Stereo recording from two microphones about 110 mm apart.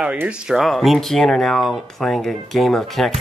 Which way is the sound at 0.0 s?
10° right (ahead or behind).